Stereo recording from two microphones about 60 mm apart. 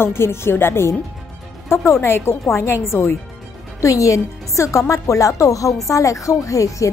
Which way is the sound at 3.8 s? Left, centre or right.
Left.